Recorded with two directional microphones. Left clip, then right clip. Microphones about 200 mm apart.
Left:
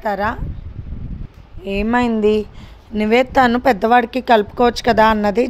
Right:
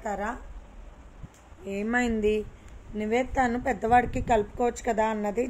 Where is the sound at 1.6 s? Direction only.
55° left (ahead or behind).